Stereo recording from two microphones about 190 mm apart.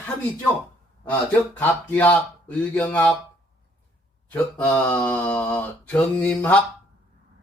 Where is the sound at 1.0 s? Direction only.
10° left (ahead or behind).